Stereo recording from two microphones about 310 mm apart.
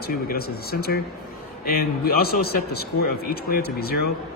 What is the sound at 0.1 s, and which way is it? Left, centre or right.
A man's voice, left.